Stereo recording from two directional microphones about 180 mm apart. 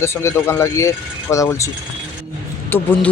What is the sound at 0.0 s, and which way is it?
Speech, 15° left (ahead or behind).